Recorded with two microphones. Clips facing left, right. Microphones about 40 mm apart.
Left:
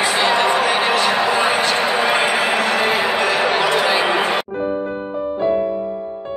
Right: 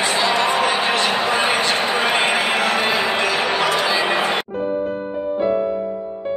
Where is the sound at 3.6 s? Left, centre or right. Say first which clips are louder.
Left 2 dB; left.